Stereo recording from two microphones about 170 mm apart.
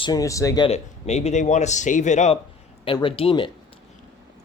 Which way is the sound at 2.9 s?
30° left (ahead or behind).